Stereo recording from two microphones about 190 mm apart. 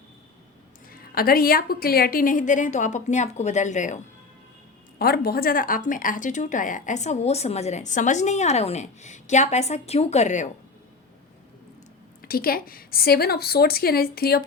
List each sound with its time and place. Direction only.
0.9 s a woman's voice: 50° left (ahead or behind)
4.9 s speech: 55° left (ahead or behind)
12.2 s a woman's voice: 50° left (ahead or behind)